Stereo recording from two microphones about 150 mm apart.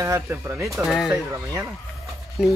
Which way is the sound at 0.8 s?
Centre (ahead or behind).